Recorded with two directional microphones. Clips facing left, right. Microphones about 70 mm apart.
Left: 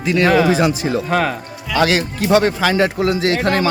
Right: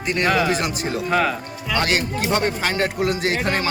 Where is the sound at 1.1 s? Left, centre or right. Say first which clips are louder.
Even; left.